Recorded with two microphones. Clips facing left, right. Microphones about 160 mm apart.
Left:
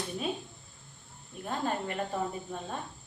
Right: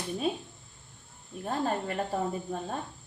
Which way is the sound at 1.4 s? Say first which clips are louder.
Right 2 dB; 35° right (ahead or behind).